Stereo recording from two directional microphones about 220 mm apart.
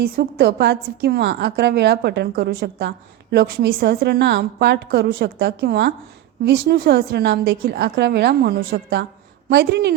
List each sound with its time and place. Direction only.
0.0 s a woman's voice: 45° right (ahead or behind)